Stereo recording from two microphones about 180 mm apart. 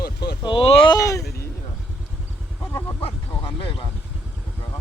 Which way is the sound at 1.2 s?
60° left (ahead or behind).